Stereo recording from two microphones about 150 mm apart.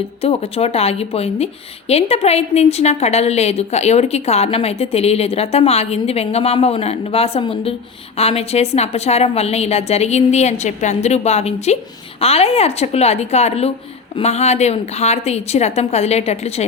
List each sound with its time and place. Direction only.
0.2 s a woman's voice: 40° left (ahead or behind)